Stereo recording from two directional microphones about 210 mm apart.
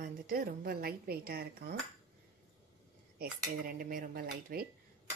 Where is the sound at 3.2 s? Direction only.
45° right (ahead or behind).